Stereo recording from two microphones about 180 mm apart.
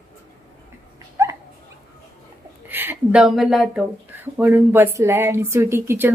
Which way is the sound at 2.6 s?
10° right (ahead or behind).